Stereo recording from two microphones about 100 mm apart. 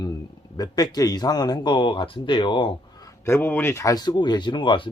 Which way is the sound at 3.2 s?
20° left (ahead or behind).